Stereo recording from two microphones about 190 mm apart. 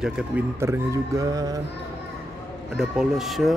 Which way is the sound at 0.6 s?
15° right (ahead or behind).